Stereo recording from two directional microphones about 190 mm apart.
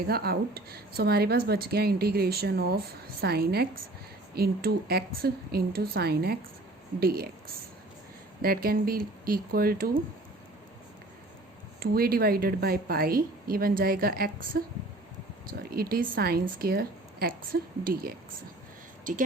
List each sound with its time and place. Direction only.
0.1 s a woman's voice: 55° right (ahead or behind)
11.8 s a woman's voice: 50° right (ahead or behind)